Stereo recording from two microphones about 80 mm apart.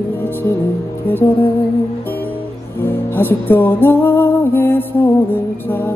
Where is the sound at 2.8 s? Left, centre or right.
Left.